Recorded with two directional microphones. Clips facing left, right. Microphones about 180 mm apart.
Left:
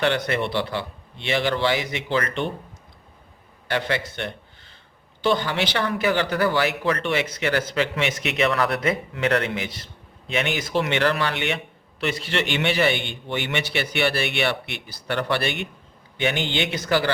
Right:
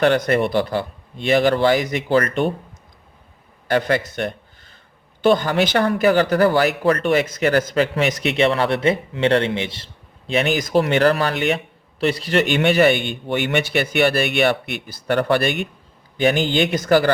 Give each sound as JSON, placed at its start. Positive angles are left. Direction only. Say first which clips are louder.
{"t": 0.0, "sound": "a man's voice", "louder": "right 6 dB", "side_deg": -45}
{"t": 3.7, "sound": "a man's voice", "louder": "right 6 dB", "side_deg": -45}